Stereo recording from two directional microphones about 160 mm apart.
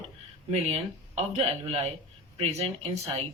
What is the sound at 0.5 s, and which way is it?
Speech, 40° right (ahead or behind).